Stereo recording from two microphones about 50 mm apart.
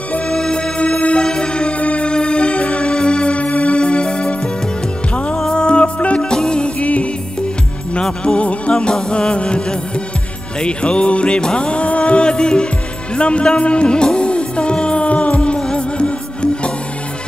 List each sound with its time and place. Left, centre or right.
0.3 s music: centre